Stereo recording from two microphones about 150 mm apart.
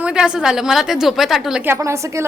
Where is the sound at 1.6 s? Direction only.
15° right (ahead or behind).